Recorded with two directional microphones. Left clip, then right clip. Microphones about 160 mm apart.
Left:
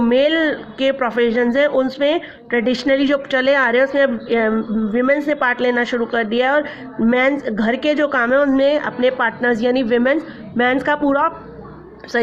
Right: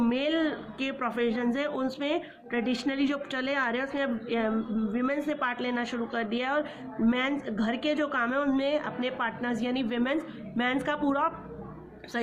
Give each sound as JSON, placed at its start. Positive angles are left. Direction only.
{"t": 0.0, "sound": "a woman's voice", "side_deg": 45}